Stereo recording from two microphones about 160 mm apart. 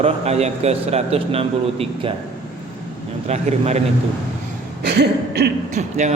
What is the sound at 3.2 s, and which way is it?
Speech, 45° right (ahead or behind).